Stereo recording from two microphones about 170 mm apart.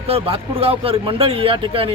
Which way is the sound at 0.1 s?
35° right (ahead or behind).